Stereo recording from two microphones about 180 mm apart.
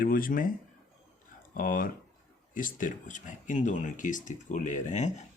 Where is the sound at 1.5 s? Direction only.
50° left (ahead or behind).